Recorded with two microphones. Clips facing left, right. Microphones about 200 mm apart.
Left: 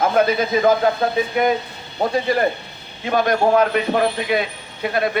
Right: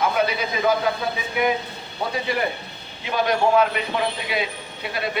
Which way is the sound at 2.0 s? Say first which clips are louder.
Left 6 dB; 45° left (ahead or behind).